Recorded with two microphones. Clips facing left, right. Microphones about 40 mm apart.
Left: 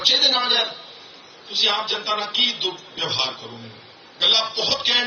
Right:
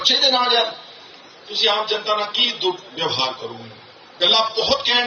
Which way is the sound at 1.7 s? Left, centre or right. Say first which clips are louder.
Right 4 dB; centre.